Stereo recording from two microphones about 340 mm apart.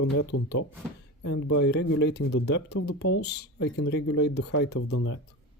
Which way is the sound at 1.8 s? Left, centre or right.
Left.